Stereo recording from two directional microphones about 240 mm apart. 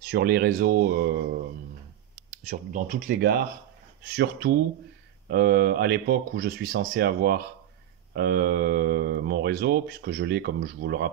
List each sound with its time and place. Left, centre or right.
0.1 s speech: right
2.5 s speech: right